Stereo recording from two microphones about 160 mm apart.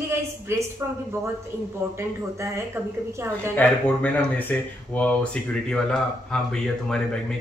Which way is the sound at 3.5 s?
10° left (ahead or behind).